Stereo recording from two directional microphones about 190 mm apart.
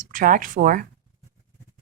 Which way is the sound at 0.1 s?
45° right (ahead or behind).